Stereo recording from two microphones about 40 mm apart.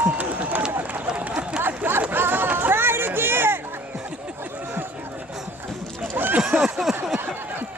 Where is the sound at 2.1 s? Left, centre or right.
Right.